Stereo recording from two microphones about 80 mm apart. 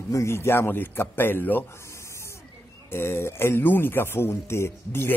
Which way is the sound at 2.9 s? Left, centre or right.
Left.